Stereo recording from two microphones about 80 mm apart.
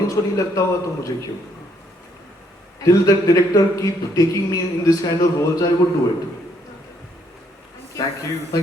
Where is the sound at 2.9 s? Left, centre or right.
Left.